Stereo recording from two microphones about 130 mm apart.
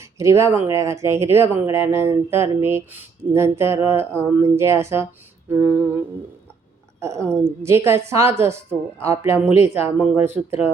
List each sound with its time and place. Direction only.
0.0 s speech: 25° right (ahead or behind)
7.3 s speech: 20° right (ahead or behind)